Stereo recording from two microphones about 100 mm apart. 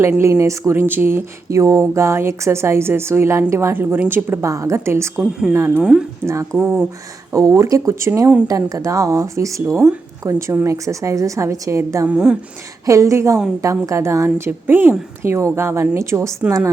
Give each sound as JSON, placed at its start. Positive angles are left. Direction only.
{"t": 0.2, "sound": "speech", "side_deg": -30}
{"t": 5.2, "sound": "speech", "side_deg": -5}
{"t": 5.5, "sound": "speech", "side_deg": -25}
{"t": 5.8, "sound": "a woman's voice", "side_deg": -5}
{"t": 7.3, "sound": "a woman's voice", "side_deg": -30}
{"t": 12.0, "sound": "speech", "side_deg": -10}
{"t": 12.8, "sound": "a woman's voice", "side_deg": -30}